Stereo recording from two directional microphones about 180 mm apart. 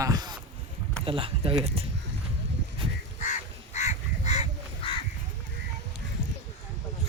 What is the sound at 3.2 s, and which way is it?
Goose, 40° left (ahead or behind).